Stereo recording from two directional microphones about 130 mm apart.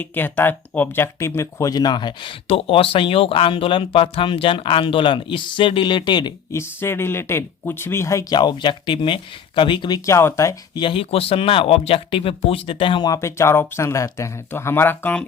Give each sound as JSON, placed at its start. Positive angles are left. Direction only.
{"t": 0.0, "sound": "speech", "side_deg": 15}
{"t": 6.5, "sound": "speech", "side_deg": 20}
{"t": 8.4, "sound": "speech", "side_deg": 35}
{"t": 10.1, "sound": "speech", "side_deg": 20}
{"t": 10.8, "sound": "speech", "side_deg": 40}
{"t": 13.1, "sound": "speech", "side_deg": 20}